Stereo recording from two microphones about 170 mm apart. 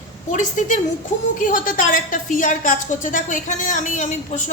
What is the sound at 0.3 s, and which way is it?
A woman's voice, 50° left (ahead or behind).